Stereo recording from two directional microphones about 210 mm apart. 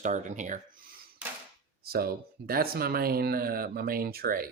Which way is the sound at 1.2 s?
5° right (ahead or behind).